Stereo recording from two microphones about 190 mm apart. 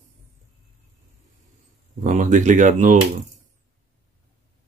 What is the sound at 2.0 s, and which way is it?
Speech, 40° right (ahead or behind).